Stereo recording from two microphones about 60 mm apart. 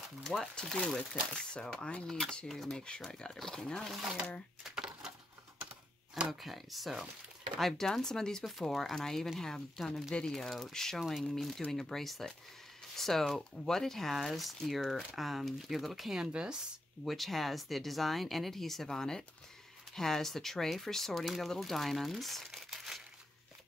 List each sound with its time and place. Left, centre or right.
0.2 s speech: centre
0.6 s speech: centre
4.7 s a sound: centre
6.4 s speech: centre
16.3 s speech: centre
17.0 s speech: centre